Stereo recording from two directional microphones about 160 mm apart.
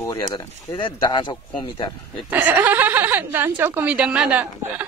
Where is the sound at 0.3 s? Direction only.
25° left (ahead or behind).